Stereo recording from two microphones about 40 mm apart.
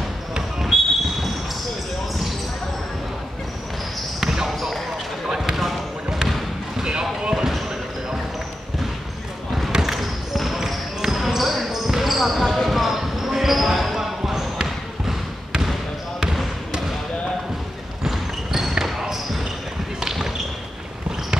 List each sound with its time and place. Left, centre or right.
0.3 s basketball bounce: centre
4.2 s basketball bounce: centre
4.5 s basketball bounce: centre
5.2 s basketball bounce: centre
6.8 s basketball bounce: centre
9.8 s basketball bounce: centre
18.0 s basketball bounce: centre
20.0 s a sound: centre